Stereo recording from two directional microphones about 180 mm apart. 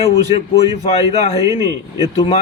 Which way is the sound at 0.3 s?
35° left (ahead or behind).